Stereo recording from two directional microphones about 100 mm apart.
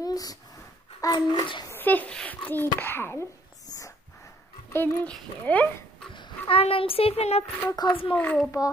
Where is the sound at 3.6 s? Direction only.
35° left (ahead or behind).